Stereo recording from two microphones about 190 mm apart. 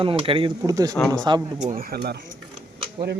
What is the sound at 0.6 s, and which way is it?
Speech, 20° right (ahead or behind).